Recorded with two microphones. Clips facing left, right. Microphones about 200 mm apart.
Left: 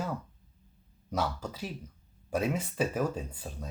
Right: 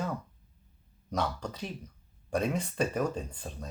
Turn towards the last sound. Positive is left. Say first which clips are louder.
# even
turn(degrees=5)  # may be behind; listen again after turning